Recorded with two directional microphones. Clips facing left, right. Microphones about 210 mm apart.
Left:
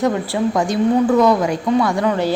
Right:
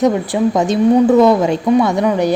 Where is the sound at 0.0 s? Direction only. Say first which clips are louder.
Right 4 dB; 20° right (ahead or behind).